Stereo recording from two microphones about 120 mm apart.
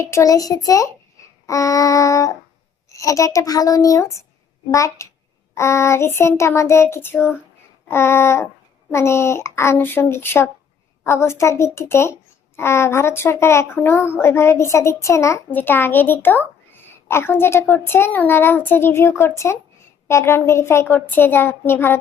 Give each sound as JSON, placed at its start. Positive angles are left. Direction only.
{"t": 0.0, "sound": "a woman's voice", "side_deg": 25}